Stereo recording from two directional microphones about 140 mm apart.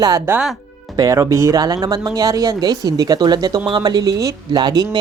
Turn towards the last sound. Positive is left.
turn(degrees=-30)  # may be behind; listen again after turning